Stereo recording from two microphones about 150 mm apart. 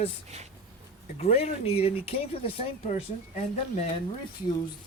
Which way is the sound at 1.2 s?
45° left (ahead or behind).